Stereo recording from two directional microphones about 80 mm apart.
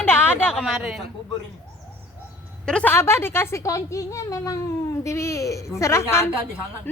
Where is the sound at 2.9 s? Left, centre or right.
Left.